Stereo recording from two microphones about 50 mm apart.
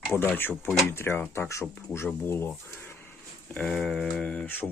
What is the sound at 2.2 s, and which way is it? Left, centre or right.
Speech, left.